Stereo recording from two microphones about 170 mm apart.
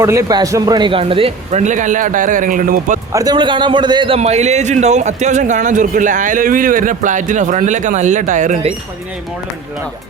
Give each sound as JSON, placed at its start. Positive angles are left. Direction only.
{"t": 0.0, "sound": "speech", "side_deg": -20}
{"t": 3.1, "sound": "a man's voice", "side_deg": -20}
{"t": 4.2, "sound": "a man's voice", "side_deg": -40}